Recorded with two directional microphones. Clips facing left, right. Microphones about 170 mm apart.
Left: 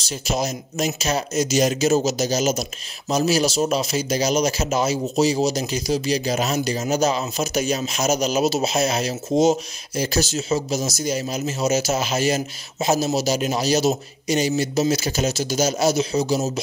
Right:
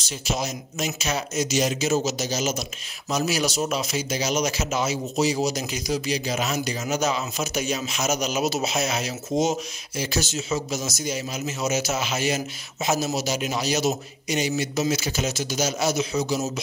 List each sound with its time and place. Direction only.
0.0 s speech: 40° left (ahead or behind)